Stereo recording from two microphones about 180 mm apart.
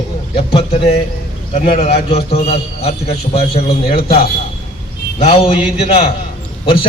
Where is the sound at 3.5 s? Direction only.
30° left (ahead or behind).